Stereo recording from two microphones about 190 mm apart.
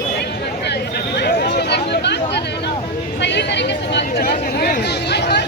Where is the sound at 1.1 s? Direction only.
60° left (ahead or behind).